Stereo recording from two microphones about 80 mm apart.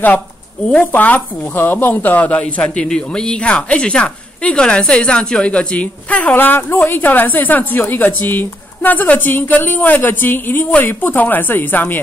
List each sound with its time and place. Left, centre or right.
0.7 s speech: centre